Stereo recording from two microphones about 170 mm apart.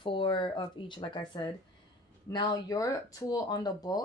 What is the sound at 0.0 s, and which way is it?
Speech, 30° left (ahead or behind).